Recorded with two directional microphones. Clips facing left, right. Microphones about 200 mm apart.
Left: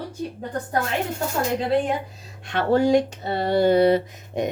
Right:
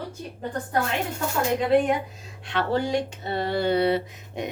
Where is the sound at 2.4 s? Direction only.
45° left (ahead or behind).